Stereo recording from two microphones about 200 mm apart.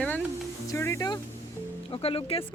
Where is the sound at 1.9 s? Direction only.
30° left (ahead or behind).